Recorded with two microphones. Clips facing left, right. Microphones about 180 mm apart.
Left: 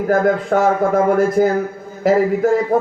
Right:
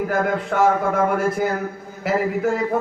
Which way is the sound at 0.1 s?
40° left (ahead or behind).